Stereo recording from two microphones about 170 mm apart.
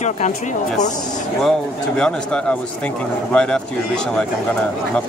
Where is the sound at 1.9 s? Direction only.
5° left (ahead or behind).